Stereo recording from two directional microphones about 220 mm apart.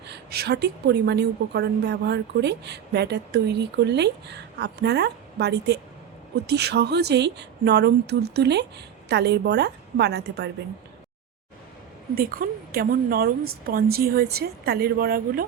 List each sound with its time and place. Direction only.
0.1 s a woman's voice: 50° right (ahead or behind)
12.1 s a woman's voice: 40° right (ahead or behind)